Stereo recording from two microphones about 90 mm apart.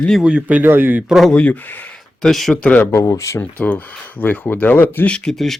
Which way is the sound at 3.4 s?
15° left (ahead or behind).